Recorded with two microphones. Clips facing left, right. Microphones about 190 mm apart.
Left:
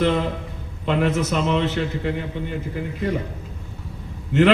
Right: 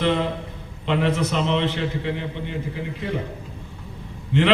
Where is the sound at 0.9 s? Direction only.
45° left (ahead or behind).